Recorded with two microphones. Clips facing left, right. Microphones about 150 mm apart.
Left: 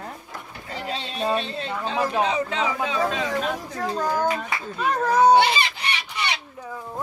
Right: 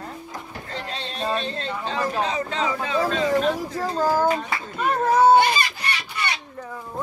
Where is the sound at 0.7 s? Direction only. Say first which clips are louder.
Left 2 dB; 10° left (ahead or behind).